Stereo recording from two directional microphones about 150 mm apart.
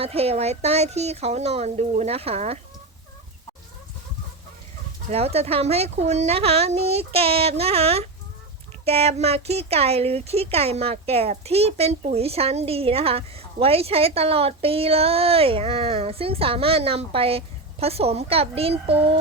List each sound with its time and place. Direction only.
0.0 s speech: 40° right (ahead or behind)
5.1 s speech: 45° right (ahead or behind)